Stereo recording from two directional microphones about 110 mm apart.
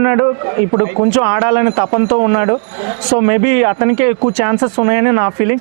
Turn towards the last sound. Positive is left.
turn(degrees=-15)  # may be behind; listen again after turning